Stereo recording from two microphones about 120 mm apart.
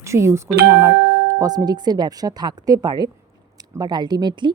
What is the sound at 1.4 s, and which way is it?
Speech, 35° right (ahead or behind).